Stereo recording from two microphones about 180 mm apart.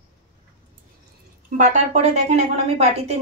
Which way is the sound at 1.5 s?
40° right (ahead or behind).